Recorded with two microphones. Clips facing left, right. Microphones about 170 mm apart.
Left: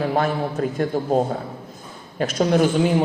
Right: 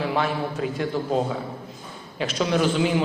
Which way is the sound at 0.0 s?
45° left (ahead or behind).